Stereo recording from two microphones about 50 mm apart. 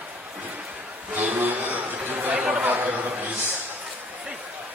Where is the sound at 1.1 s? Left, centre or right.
Right.